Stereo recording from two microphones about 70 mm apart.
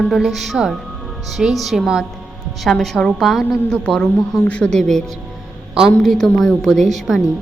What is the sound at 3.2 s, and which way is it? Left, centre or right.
Speech, centre.